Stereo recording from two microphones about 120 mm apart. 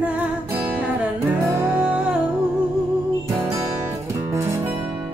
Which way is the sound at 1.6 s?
10° right (ahead or behind).